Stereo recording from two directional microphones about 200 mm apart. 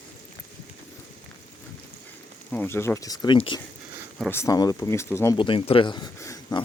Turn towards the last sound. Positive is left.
turn(degrees=15)  # may be behind; listen again after turning